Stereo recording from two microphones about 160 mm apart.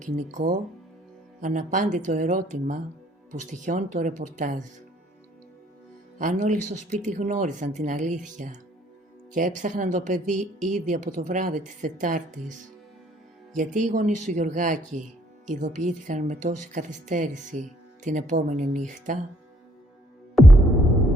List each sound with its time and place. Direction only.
0.0 s a woman's voice: 50° right (ahead or behind)
6.1 s a woman's voice: 50° right (ahead or behind)
13.6 s a woman's voice: 50° right (ahead or behind)